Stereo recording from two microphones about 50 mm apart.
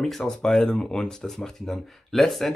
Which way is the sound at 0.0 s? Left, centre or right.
Centre.